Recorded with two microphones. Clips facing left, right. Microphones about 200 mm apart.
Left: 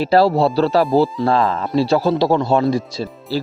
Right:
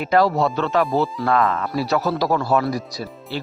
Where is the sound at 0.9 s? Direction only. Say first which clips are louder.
Left 6 dB; centre (ahead or behind).